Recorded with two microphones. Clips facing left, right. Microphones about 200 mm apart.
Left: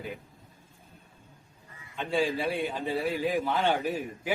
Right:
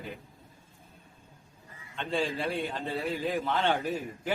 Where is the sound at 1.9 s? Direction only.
10° left (ahead or behind).